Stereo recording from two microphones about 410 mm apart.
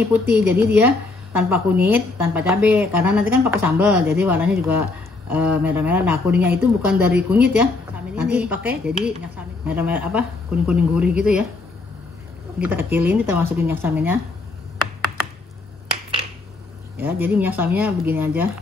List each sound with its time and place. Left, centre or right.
0.1 s a woman's voice: centre
12.6 s a woman's voice: centre
17.0 s a woman's voice: centre